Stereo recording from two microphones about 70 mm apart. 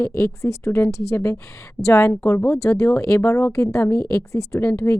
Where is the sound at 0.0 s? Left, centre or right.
Left.